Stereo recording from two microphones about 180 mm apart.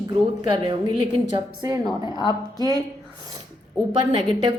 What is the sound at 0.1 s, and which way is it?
A woman's voice, 25° right (ahead or behind).